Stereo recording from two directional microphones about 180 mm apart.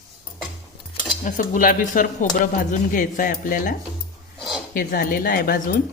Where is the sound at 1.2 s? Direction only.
50° left (ahead or behind).